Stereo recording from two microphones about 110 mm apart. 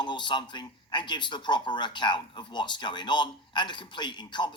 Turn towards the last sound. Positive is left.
turn(degrees=45)  # may be behind; listen again after turning